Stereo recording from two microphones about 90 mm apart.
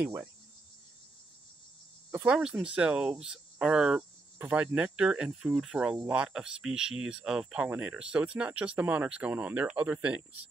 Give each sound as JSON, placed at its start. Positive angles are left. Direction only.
{"t": 0.0, "sound": "insect", "side_deg": -20}
{"t": 2.2, "sound": "speech", "side_deg": -10}
{"t": 7.7, "sound": "speech", "side_deg": -15}